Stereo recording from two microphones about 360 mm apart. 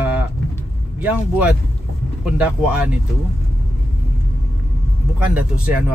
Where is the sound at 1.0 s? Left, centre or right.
Centre.